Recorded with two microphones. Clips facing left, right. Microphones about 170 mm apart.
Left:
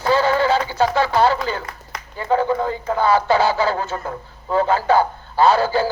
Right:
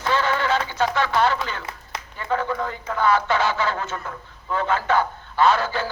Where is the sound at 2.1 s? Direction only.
30° left (ahead or behind).